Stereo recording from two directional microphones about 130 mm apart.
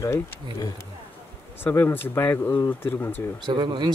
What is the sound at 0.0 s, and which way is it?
Speech, 20° left (ahead or behind).